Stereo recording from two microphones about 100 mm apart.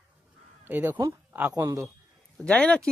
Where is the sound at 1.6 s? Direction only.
30° right (ahead or behind).